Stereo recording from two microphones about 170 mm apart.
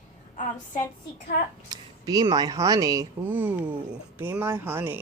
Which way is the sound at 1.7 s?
20° right (ahead or behind).